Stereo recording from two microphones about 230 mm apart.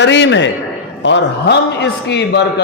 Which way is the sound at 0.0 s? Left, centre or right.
Left.